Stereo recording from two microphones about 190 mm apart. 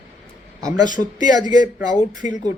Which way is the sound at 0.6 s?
20° right (ahead or behind).